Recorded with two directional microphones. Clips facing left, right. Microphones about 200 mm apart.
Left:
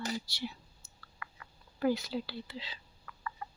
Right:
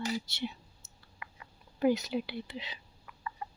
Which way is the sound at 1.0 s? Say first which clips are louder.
Even; 20° right (ahead or behind).